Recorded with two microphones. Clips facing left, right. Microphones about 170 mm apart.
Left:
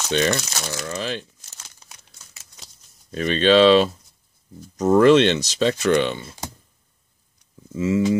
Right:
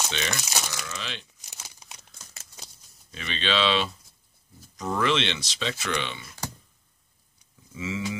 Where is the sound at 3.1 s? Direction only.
45° left (ahead or behind).